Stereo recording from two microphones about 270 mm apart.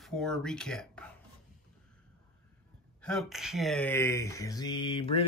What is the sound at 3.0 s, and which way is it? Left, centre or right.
Speech, centre.